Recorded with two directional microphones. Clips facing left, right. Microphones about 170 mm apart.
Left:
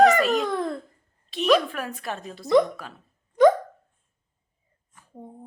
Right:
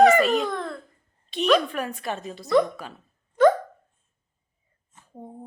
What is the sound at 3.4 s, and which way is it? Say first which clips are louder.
Dog: left 1 dB; 15° left (ahead or behind).